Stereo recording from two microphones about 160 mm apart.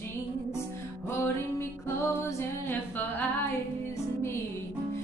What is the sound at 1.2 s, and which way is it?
Music, 15° left (ahead or behind).